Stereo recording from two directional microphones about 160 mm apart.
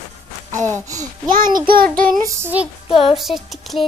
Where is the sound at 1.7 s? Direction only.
65° right (ahead or behind).